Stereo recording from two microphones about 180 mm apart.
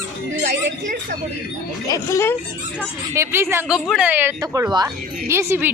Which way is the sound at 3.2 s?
15° right (ahead or behind).